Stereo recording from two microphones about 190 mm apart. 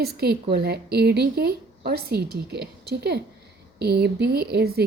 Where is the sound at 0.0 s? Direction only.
55° right (ahead or behind).